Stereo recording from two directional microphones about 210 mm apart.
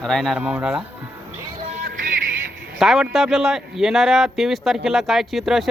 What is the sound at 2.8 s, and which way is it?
A man's voice, centre (ahead or behind).